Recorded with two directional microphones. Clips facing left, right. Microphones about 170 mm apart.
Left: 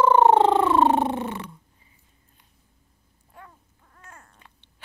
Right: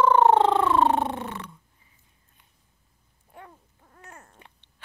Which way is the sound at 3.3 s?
20° right (ahead or behind).